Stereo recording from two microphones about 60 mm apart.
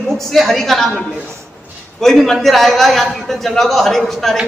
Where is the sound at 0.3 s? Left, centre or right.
Centre.